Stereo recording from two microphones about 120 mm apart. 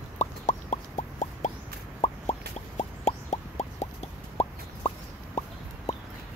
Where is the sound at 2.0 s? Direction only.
65° left (ahead or behind).